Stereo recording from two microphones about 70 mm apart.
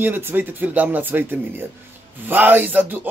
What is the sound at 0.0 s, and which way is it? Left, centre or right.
Speech, right.